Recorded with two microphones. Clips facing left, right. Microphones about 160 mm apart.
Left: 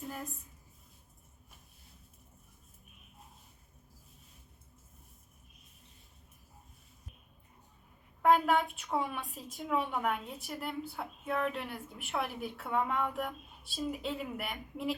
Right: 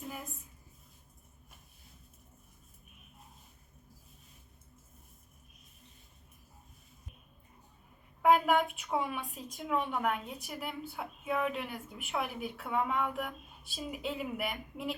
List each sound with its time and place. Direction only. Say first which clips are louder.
8.2 s a woman's voice: right 1 dB; centre (ahead or behind)